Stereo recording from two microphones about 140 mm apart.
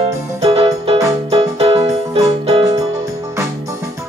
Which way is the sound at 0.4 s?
45° right (ahead or behind).